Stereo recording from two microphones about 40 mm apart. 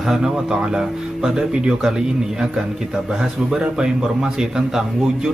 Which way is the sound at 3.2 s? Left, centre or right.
Centre.